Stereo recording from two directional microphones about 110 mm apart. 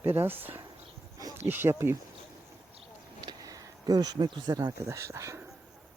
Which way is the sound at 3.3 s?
35° right (ahead or behind).